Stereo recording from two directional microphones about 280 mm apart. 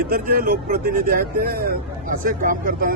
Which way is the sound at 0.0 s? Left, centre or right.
Right.